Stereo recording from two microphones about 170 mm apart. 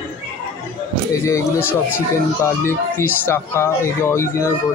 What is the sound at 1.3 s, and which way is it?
Speech, 15° left (ahead or behind).